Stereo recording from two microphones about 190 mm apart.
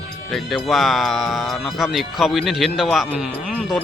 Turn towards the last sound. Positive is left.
turn(degrees=-5)  # may be behind; listen again after turning